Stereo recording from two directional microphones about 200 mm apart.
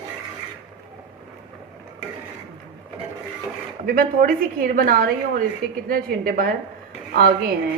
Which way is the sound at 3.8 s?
45° right (ahead or behind).